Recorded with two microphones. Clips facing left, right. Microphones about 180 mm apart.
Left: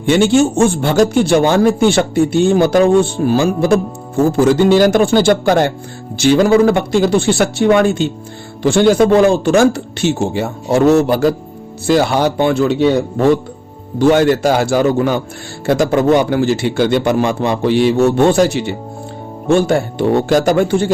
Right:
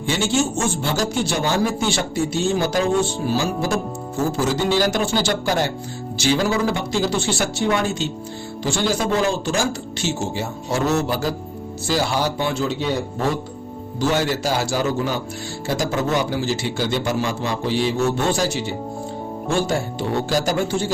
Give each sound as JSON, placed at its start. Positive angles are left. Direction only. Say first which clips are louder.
{"t": 0.0, "sound": "a man's voice", "louder": "left 10 dB", "side_deg": 60}
{"t": 14.0, "sound": "a man's voice", "louder": "left 10 dB", "side_deg": 55}